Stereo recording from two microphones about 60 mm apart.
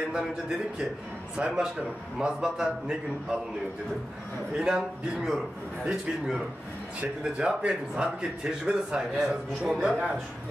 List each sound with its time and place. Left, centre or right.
1.4 s a man's voice: right
2.1 s a man's voice: centre
4.6 s a man's voice: centre
7.0 s a man's voice: centre